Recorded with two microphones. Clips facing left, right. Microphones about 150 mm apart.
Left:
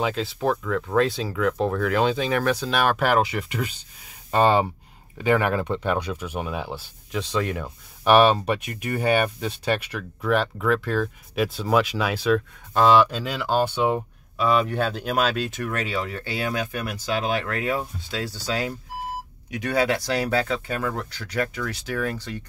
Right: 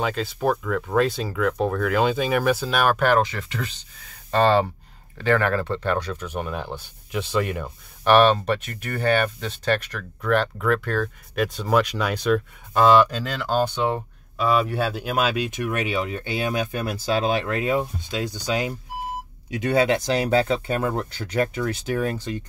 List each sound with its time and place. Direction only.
0.0 s speech: centre (ahead or behind); by 16.8 s 20° right (ahead or behind)
16.8 s speech: 30° right (ahead or behind)